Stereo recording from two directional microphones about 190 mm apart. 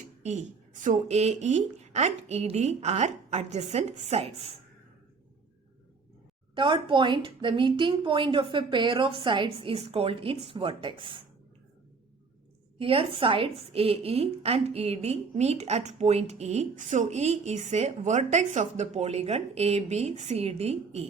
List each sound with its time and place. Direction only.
0.2 s a woman's voice: 40° right (ahead or behind)
6.5 s a woman's voice: 25° right (ahead or behind)
12.8 s a woman's voice: 30° right (ahead or behind)